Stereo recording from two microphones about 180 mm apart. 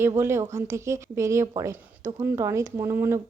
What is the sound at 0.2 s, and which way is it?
Speech, 15° right (ahead or behind).